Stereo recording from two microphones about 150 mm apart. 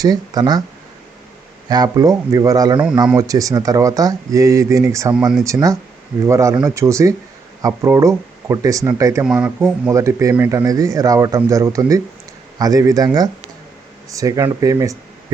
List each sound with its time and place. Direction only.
0.0 s speech: 25° right (ahead or behind)
1.7 s speech: 25° right (ahead or behind)
5.1 s speech: 5° right (ahead or behind)
5.4 s speech: 20° right (ahead or behind)
9.2 s speech: 5° right (ahead or behind); by 13.1 s 25° right (ahead or behind)
14.1 s speech: 20° right (ahead or behind)